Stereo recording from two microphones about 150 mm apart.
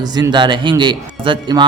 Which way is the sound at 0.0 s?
25° right (ahead or behind).